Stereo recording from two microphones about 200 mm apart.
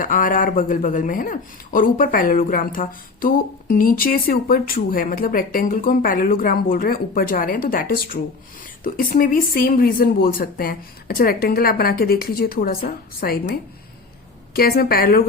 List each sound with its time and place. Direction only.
0.0 s speech: 40° left (ahead or behind)
14.5 s speech: 50° left (ahead or behind)